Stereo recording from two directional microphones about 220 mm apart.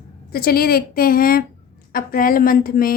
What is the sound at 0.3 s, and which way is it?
A woman's voice, 45° left (ahead or behind).